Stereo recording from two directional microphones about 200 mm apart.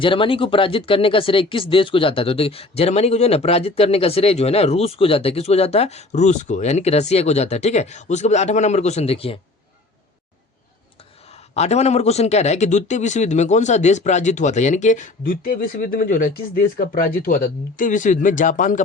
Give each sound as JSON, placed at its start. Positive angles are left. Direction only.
{"t": 0.0, "sound": "speech", "side_deg": 25}
{"t": 11.3, "sound": "speech", "side_deg": 35}